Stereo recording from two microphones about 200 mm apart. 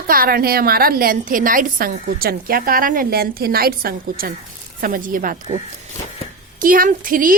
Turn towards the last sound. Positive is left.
turn(degrees=-45)  # may be behind; listen again after turning